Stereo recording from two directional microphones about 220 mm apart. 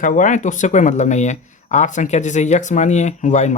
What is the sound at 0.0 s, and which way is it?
Speech, 35° left (ahead or behind).